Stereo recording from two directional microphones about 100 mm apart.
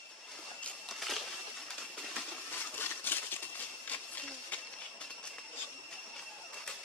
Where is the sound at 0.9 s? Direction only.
Centre (ahead or behind).